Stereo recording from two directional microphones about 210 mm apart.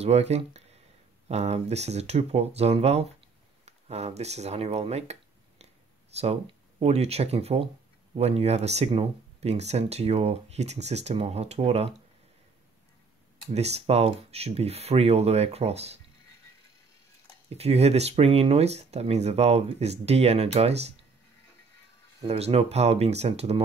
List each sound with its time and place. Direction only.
0.0 s speech: 30° right (ahead or behind)
13.5 s speech: 30° right (ahead or behind)
17.5 s speech: 30° right (ahead or behind)
22.2 s speech: 30° right (ahead or behind)